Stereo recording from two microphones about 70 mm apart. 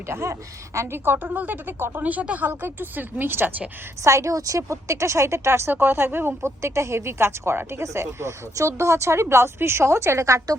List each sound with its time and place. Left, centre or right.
0.1 s speech: right
4.0 s a woman's voice: right
6.4 s speech: right